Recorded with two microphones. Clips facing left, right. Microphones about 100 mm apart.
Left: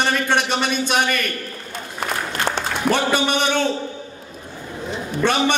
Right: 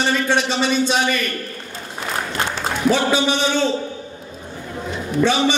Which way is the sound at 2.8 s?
55° left (ahead or behind).